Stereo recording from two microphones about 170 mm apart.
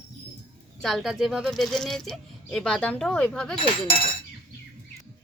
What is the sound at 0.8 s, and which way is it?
Speech, centre (ahead or behind).